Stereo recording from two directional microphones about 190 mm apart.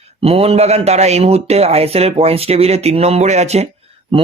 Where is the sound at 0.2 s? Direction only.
30° right (ahead or behind).